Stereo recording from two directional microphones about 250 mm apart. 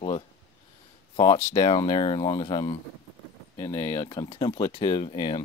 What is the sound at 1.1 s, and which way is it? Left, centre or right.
Speech, centre.